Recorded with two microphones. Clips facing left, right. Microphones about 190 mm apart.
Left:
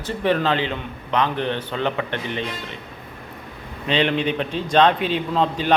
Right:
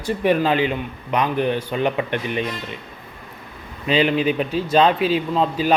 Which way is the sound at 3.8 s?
5° right (ahead or behind).